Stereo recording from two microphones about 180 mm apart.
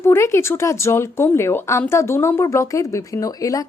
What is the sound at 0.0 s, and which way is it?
Speech, 15° left (ahead or behind).